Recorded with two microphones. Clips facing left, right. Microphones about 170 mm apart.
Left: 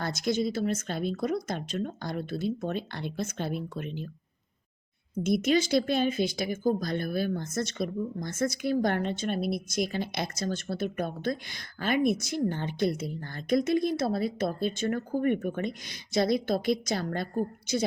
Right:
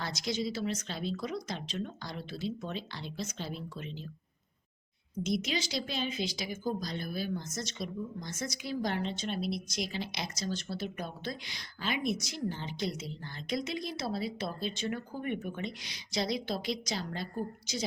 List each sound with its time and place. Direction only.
0.0 s speech: 50° left (ahead or behind)
5.2 s speech: 50° left (ahead or behind)